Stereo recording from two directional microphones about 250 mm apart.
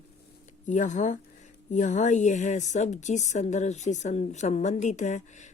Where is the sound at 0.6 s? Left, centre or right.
Left.